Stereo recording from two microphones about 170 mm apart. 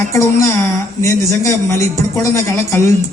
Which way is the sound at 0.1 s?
20° left (ahead or behind).